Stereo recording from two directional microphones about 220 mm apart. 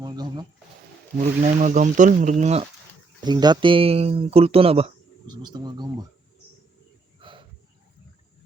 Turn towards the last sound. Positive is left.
turn(degrees=-25)  # may be behind; listen again after turning